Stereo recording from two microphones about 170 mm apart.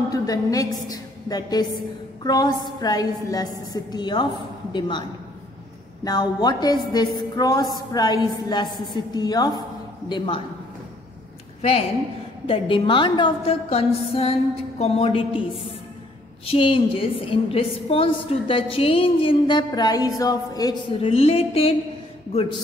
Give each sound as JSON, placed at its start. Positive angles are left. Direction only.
{"t": 0.1, "sound": "a woman's voice", "side_deg": 20}
{"t": 6.0, "sound": "a woman's voice", "side_deg": 25}
{"t": 12.4, "sound": "a woman's voice", "side_deg": 30}
{"t": 21.1, "sound": "a woman's voice", "side_deg": 35}